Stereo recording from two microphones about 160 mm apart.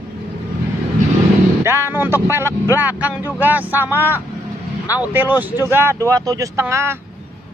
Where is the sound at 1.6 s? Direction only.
15° right (ahead or behind).